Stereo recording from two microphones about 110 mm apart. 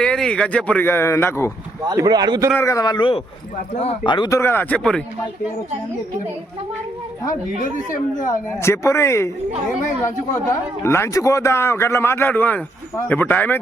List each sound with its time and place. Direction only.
0.0 s speech: 10° left (ahead or behind); by 1.5 s 25° left (ahead or behind)
1.8 s speech: 35° right (ahead or behind)
2.6 s speech: 30° left (ahead or behind); by 4.3 s 45° left (ahead or behind)
4.3 s a man's voice: 25° left (ahead or behind)
4.8 s speech: 5° left (ahead or behind)
8.3 s a man's voice: 25° left (ahead or behind)
10.5 s a man's voice: 25° left (ahead or behind)